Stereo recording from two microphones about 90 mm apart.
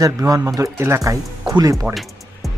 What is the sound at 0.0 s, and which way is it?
Speech, 40° right (ahead or behind).